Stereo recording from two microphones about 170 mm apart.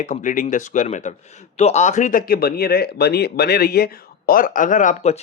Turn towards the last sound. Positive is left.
turn(degrees=45)  # may be behind; listen again after turning